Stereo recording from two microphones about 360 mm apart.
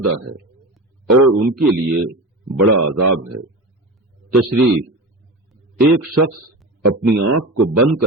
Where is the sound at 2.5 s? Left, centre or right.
Right.